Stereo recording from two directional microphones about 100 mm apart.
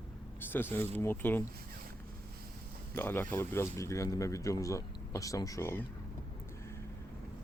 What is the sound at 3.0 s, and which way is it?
Speech, 20° left (ahead or behind).